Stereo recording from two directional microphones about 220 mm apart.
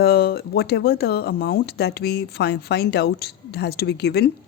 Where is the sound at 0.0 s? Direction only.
45° left (ahead or behind).